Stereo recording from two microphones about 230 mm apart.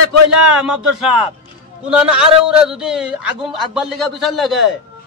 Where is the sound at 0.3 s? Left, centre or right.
Centre.